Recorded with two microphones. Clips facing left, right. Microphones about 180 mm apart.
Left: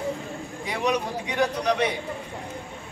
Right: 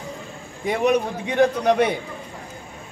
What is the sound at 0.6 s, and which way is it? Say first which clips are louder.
A man's voice: right 6 dB; 50° right (ahead or behind).